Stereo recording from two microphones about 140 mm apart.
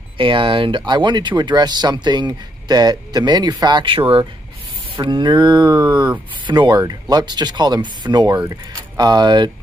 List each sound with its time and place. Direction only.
0.2 s speech: 35° right (ahead or behind)